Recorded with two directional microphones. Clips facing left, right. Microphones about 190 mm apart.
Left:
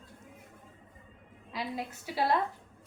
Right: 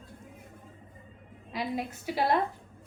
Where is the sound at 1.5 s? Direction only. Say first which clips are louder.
Right 4 dB; 15° right (ahead or behind).